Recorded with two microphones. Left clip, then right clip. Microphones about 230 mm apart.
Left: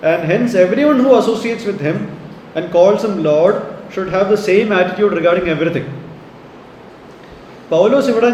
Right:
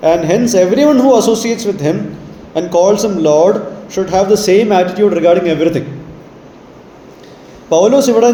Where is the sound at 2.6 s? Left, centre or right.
Right.